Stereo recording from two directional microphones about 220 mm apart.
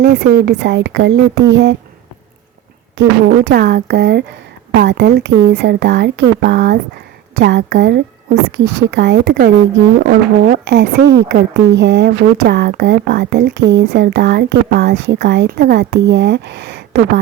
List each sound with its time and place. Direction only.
0.0 s speech: 50° right (ahead or behind)
3.0 s speech: 50° right (ahead or behind)